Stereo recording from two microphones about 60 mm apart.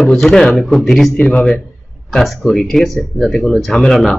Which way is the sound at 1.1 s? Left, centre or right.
Left.